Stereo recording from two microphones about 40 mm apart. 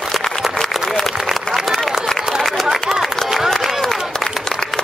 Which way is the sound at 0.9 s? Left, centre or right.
Centre.